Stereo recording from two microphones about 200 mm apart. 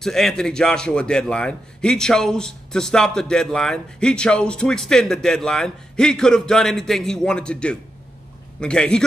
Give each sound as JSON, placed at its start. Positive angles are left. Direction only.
{"t": 0.0, "sound": "a man's voice", "side_deg": 0}